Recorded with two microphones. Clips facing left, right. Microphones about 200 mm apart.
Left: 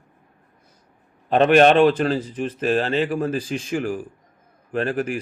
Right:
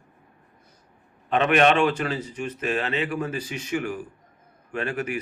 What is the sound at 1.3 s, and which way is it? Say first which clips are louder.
A man's voice: left 5 dB; 35° left (ahead or behind).